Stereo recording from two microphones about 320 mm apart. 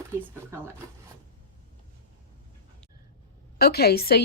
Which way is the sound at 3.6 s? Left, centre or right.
Left.